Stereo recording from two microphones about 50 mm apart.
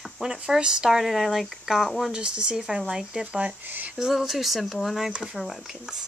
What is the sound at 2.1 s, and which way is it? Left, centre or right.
Speech, right.